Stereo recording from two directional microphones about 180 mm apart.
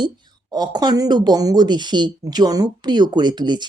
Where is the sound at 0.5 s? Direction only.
20° right (ahead or behind).